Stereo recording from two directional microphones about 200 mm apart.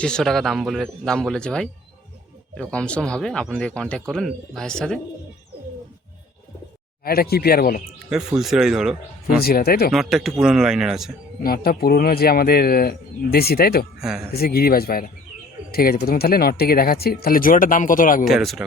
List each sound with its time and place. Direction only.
0.0 s speech: 5° left (ahead or behind)
7.0 s speech: 50° left (ahead or behind)
8.4 s speech: centre (ahead or behind)
9.2 s speech: 50° left (ahead or behind)
9.9 s speech: centre (ahead or behind)
11.4 s speech: 50° left (ahead or behind)
14.0 s speech: centre (ahead or behind)
14.3 s speech: 50° left (ahead or behind)
18.3 s speech: centre (ahead or behind)